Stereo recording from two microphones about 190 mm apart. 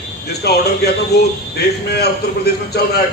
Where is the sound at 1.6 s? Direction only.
60° left (ahead or behind).